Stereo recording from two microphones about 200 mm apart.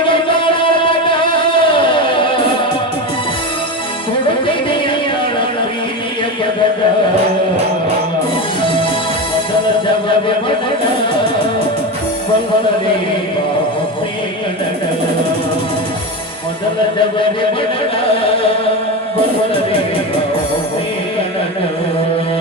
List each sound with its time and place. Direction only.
0.0 s music: 25° left (ahead or behind)
4.3 s music: 25° left (ahead or behind)